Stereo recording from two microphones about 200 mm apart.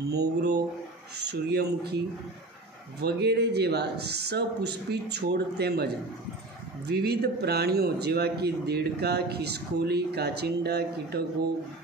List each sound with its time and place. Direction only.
0.1 s speech: 55° right (ahead or behind)
3.0 s speech: 55° right (ahead or behind)
6.9 s a man's voice: 55° right (ahead or behind)